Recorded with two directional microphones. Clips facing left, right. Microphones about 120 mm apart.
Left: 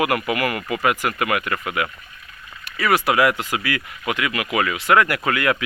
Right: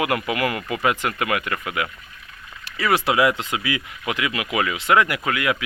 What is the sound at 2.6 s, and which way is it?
Speech, 25° right (ahead or behind).